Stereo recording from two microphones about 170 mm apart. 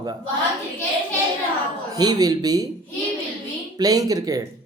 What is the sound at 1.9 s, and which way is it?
Speech, 25° right (ahead or behind).